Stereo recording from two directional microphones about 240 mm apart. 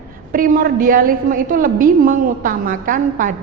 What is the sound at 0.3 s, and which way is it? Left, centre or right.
A woman's voice, right.